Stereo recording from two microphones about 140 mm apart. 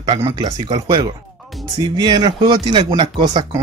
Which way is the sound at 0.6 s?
30° right (ahead or behind).